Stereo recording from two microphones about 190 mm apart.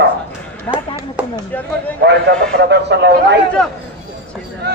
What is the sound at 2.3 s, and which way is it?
Speech, 55° right (ahead or behind).